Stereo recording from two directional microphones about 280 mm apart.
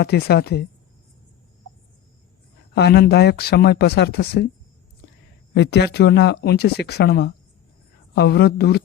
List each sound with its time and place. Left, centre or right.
0.0 s speech: left
2.7 s speech: left
5.5 s speech: left